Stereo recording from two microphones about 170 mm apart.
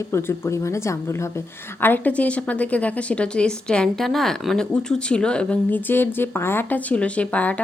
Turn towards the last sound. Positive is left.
turn(degrees=10)  # may be behind; listen again after turning